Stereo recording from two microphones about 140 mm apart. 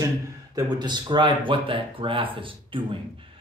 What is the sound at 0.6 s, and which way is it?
Speech, 30° right (ahead or behind).